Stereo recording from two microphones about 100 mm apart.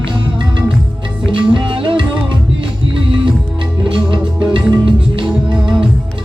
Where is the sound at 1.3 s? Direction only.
55° right (ahead or behind).